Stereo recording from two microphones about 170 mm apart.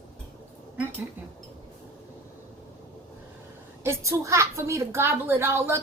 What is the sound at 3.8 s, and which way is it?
A woman's voice, 20° right (ahead or behind).